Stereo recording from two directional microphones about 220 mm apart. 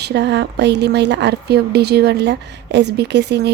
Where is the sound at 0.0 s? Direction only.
50° right (ahead or behind).